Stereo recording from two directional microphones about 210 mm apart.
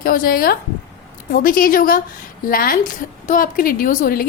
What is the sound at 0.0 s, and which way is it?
A woman's voice, 45° left (ahead or behind).